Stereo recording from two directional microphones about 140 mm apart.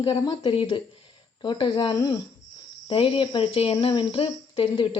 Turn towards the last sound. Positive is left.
turn(degrees=40)  # may be behind; listen again after turning